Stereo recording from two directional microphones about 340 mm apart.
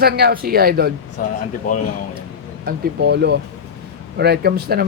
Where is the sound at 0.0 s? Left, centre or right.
Right.